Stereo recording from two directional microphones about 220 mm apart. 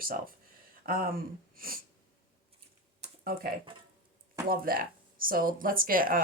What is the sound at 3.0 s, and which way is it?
Computer keyboard, 40° right (ahead or behind).